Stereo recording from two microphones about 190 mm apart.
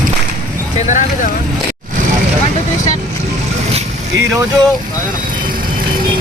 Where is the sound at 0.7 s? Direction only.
40° left (ahead or behind).